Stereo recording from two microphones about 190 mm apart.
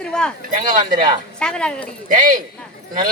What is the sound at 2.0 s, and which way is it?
Speech, 45° right (ahead or behind).